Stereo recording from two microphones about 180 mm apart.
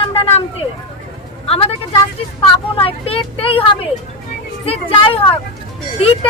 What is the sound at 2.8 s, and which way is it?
Speech, 30° left (ahead or behind).